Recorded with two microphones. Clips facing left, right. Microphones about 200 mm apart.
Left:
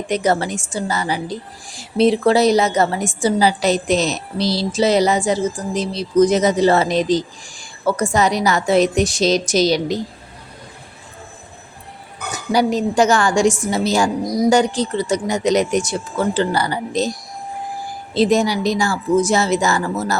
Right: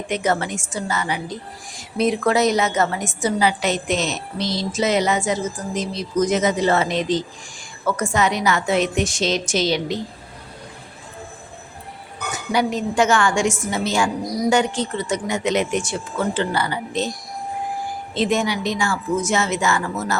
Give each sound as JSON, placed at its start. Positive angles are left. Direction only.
{"t": 0.1, "sound": "a woman's voice", "side_deg": 35}
{"t": 12.3, "sound": "a woman's voice", "side_deg": 35}
{"t": 18.1, "sound": "a woman's voice", "side_deg": 35}